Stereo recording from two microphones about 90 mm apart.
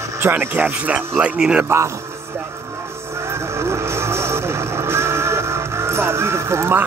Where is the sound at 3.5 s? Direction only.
30° right (ahead or behind).